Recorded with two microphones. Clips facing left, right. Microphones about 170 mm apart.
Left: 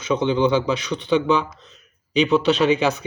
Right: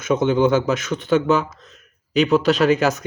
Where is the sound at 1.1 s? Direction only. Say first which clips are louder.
Right 1 dB; 5° right (ahead or behind).